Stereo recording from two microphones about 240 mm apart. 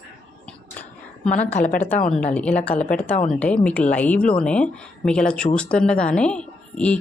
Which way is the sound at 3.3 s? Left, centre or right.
Centre.